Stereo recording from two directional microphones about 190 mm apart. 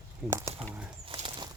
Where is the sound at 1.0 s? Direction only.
25° right (ahead or behind).